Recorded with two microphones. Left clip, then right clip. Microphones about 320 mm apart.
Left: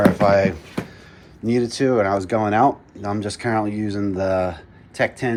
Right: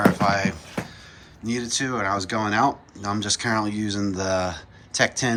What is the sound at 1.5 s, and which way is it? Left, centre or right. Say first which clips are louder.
Speech: left 7 dB; centre.